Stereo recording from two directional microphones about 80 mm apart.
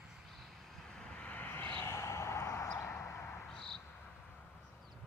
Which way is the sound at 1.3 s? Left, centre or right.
Left.